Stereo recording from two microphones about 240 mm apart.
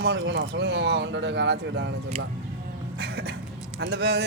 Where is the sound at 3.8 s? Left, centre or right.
Right.